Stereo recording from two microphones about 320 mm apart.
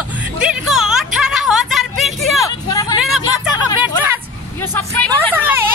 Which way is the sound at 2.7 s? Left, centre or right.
Centre.